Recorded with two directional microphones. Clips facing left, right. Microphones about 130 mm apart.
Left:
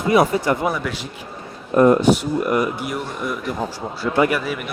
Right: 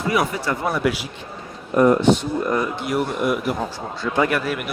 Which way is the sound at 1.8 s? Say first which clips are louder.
Left 2 dB; 20° left (ahead or behind).